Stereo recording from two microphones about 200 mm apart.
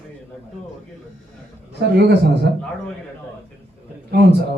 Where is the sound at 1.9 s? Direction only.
55° right (ahead or behind).